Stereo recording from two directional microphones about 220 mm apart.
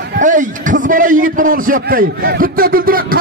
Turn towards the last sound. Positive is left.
turn(degrees=-40)  # may be behind; listen again after turning